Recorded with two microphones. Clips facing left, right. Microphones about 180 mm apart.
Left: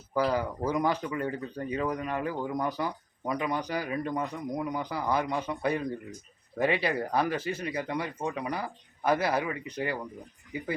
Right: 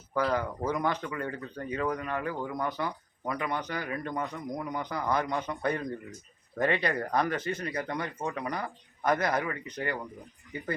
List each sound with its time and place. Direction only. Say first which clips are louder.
0.1 s speech: left 1 dB; 10° left (ahead or behind)